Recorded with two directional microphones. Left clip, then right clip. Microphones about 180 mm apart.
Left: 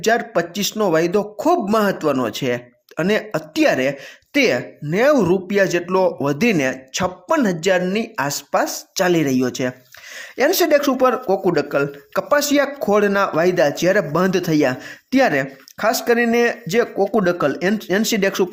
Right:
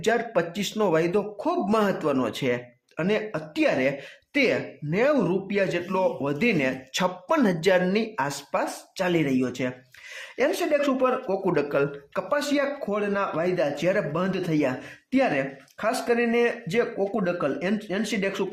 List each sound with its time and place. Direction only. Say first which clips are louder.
0.0 s speech: left 6 dB; 25° left (ahead or behind)
6.9 s speech: left 4 dB; 15° left (ahead or behind)
10.2 s a sound: left 7 dB; 25° left (ahead or behind)
10.6 s speech: left 9 dB; 35° left (ahead or behind)
12.3 s speech: left 8 dB; 35° left (ahead or behind)